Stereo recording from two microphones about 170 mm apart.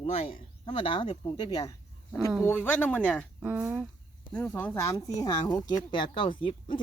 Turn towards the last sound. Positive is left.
turn(degrees=30)  # may be behind; listen again after turning